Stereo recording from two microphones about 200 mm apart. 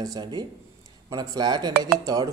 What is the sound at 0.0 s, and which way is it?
A man's voice, 20° right (ahead or behind).